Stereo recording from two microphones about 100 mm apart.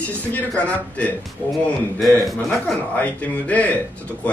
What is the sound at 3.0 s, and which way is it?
Speech, 15° left (ahead or behind).